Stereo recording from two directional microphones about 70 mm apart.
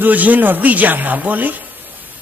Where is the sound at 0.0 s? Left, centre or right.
Right.